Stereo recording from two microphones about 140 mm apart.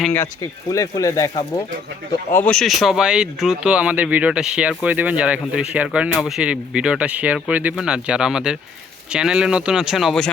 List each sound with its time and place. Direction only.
0.7 s speech: 25° left (ahead or behind)
2.3 s speech: 10° left (ahead or behind)